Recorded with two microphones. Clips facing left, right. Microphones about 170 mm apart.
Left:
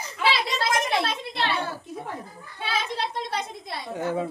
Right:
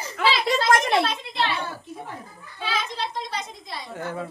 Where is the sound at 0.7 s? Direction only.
60° right (ahead or behind).